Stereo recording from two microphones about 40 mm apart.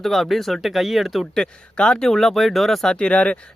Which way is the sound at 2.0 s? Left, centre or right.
Centre.